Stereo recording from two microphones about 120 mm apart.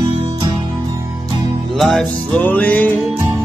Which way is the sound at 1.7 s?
Centre (ahead or behind).